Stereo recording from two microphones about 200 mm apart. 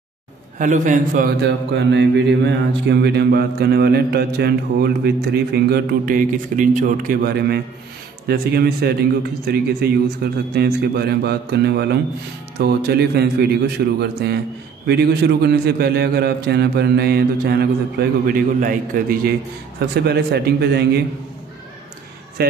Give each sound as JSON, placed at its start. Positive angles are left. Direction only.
{"t": 0.6, "sound": "a man's voice", "side_deg": -40}
{"t": 1.7, "sound": "mantra", "side_deg": -60}
{"t": 13.9, "sound": "a man's voice", "side_deg": -55}
{"t": 14.9, "sound": "mantra", "side_deg": -55}
{"t": 20.1, "sound": "a man's voice", "side_deg": -55}
{"t": 22.4, "sound": "speech", "side_deg": -50}